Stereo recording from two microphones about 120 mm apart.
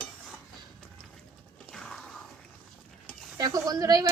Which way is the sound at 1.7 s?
5° left (ahead or behind).